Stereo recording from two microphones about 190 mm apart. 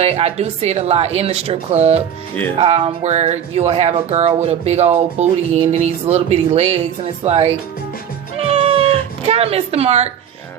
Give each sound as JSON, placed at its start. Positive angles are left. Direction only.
{"t": 0.0, "sound": "speech", "side_deg": -30}
{"t": 8.4, "sound": "cat", "side_deg": -30}